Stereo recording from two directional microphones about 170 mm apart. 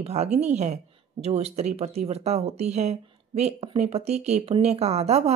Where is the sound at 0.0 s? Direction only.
40° right (ahead or behind).